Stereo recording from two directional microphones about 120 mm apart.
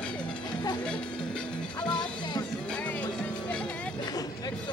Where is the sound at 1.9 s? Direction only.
40° left (ahead or behind).